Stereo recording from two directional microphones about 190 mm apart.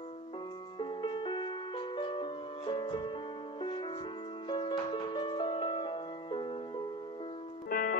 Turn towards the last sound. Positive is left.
turn(degrees=50)  # may be behind; listen again after turning